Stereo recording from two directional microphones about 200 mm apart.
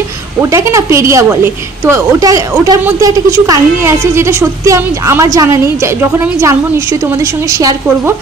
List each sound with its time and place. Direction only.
0.4 s a woman's voice: 15° right (ahead or behind)